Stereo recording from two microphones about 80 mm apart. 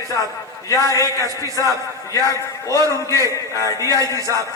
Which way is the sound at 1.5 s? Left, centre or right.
Right.